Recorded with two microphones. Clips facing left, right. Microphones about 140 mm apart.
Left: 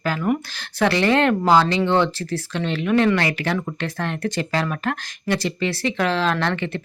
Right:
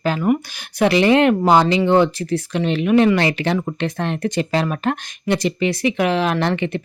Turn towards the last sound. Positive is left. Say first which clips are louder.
# right 3 dB
turn(degrees=-15)  # may be behind; listen again after turning